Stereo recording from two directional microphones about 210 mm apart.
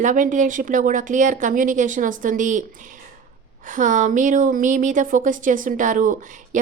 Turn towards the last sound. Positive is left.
turn(degrees=-35)  # may be behind; listen again after turning